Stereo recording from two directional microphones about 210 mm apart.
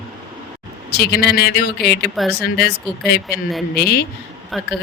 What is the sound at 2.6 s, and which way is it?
Speech, 50° left (ahead or behind).